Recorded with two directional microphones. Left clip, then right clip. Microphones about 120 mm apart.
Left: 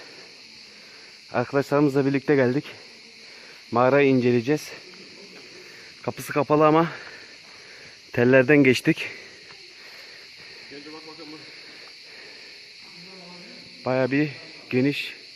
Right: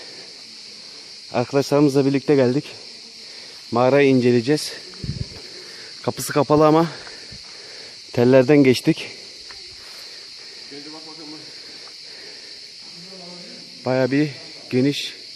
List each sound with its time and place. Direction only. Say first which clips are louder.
1.3 s speech: right 4 dB; 25° right (ahead or behind)
3.7 s speech: right 3 dB; 20° right (ahead or behind)
6.1 s speech: right 4 dB; 40° right (ahead or behind)
8.1 s speech: right 3 dB; 30° right (ahead or behind)
13.8 s speech: right 3 dB; 30° right (ahead or behind)